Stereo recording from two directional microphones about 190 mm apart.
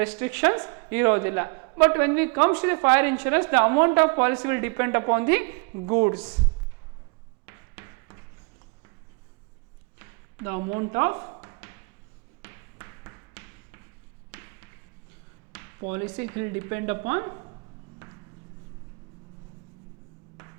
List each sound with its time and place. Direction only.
0.0 s a woman's voice: 15° right (ahead or behind)
7.4 s a sound: 15° right (ahead or behind)
10.0 s a sound: 15° right (ahead or behind)
12.4 s music: 15° right (ahead or behind)
14.3 s basketball bounce: 15° right (ahead or behind)
15.5 s a woman's voice: 15° right (ahead or behind)